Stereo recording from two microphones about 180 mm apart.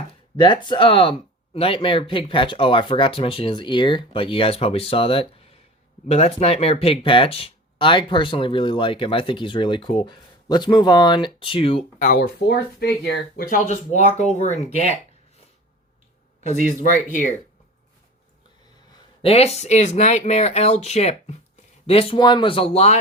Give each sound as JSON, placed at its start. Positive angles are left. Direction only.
{"t": 0.1, "sound": "speech", "side_deg": 25}
{"t": 12.5, "sound": "speech", "side_deg": 70}
{"t": 13.7, "sound": "speech", "side_deg": 40}
{"t": 16.5, "sound": "speech", "side_deg": -45}
{"t": 17.1, "sound": "speech", "side_deg": 45}
{"t": 19.2, "sound": "speech", "side_deg": 35}